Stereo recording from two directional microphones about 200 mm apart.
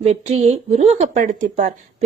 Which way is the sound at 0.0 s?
35° right (ahead or behind).